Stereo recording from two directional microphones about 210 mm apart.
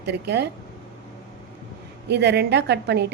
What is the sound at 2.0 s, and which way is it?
A woman's voice, 55° right (ahead or behind).